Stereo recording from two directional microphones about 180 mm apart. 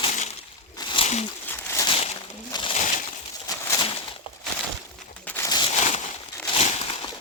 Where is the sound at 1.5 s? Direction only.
15° left (ahead or behind).